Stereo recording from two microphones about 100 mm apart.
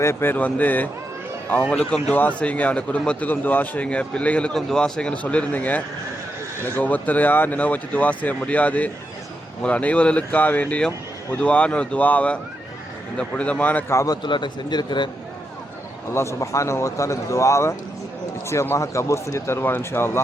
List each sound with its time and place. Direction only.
0.0 s a man's voice: 25° left (ahead or behind)
13.9 s a man's voice: 35° left (ahead or behind)
14.2 s speech: 50° left (ahead or behind)
16.1 s a man's voice: 30° left (ahead or behind)